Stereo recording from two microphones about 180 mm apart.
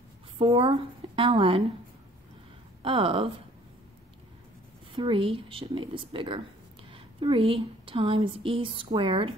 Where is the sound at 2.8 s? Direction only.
30° right (ahead or behind).